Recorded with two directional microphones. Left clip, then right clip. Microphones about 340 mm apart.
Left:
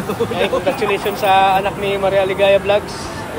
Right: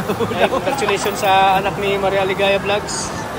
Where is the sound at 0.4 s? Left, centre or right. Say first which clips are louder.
Even; centre.